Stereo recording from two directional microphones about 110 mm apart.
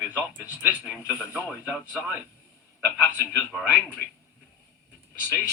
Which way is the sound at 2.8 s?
15° left (ahead or behind).